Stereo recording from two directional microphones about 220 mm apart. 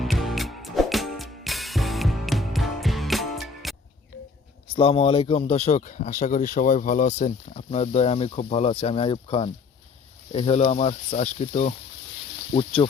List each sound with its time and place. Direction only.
0.0 s music: centre (ahead or behind)
4.7 s speech: 25° left (ahead or behind)